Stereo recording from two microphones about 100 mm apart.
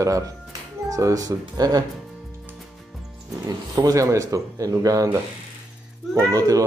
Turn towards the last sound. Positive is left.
turn(degrees=-35)  # may be behind; listen again after turning